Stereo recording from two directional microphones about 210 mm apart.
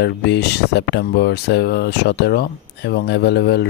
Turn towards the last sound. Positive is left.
turn(degrees=50)  # may be behind; listen again after turning